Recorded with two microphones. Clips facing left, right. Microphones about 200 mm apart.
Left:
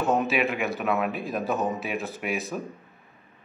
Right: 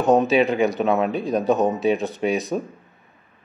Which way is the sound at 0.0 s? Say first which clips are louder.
Right 7 dB; 35° right (ahead or behind).